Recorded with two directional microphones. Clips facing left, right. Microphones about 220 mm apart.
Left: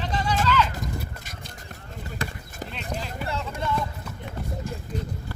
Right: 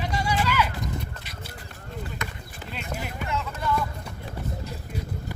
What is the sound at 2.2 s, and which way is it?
Basketball bounce, 30° left (ahead or behind).